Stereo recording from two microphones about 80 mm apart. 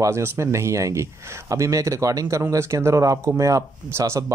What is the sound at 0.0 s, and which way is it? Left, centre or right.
Speech, right.